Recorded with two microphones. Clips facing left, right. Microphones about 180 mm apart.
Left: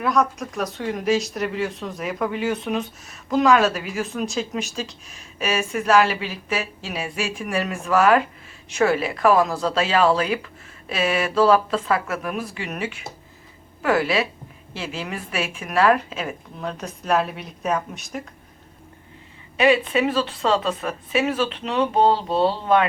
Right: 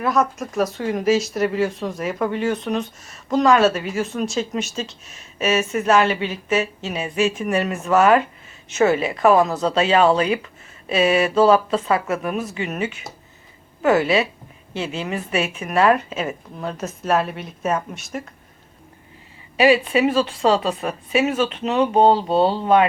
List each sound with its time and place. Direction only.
0.0 s speech: centre (ahead or behind)
19.6 s speech: 5° right (ahead or behind)
22.0 s speech: 35° right (ahead or behind)